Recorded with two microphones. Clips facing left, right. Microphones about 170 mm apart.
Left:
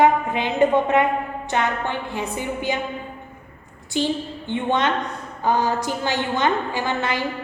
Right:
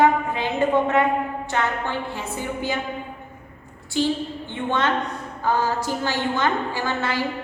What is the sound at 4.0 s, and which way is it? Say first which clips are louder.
A woman's voice: even; 15° left (ahead or behind).